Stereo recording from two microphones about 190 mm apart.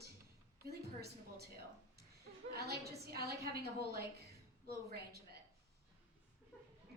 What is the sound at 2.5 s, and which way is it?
A woman's voice, 55° right (ahead or behind).